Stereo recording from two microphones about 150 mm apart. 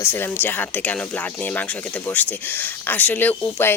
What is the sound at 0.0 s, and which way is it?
Speech, 15° left (ahead or behind).